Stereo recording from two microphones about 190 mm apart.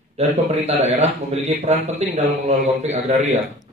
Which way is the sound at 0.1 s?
35° right (ahead or behind).